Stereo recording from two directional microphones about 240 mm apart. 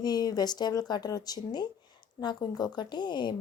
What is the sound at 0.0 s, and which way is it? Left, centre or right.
Speech, centre.